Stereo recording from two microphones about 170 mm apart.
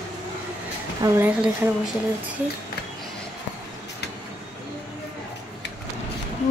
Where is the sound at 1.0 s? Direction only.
20° right (ahead or behind).